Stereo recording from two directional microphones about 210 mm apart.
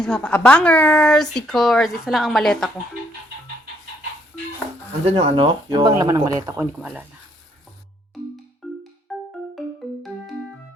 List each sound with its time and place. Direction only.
0.0 s speech: 5° left (ahead or behind)
5.0 s speech: 25° right (ahead or behind)
9.1 s music: centre (ahead or behind)